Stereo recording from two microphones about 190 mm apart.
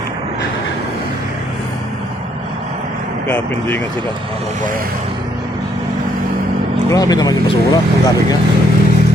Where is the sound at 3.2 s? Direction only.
5° left (ahead or behind).